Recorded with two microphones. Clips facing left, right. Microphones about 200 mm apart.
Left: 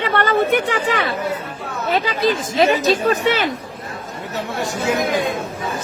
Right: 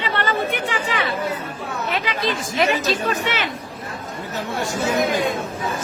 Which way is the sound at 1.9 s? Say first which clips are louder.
Left 7 dB; 35° left (ahead or behind).